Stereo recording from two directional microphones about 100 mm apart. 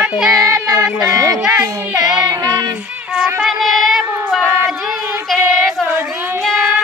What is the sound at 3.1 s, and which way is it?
Child singing, 5° right (ahead or behind).